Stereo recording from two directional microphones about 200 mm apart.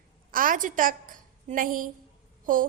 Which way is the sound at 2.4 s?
45° right (ahead or behind).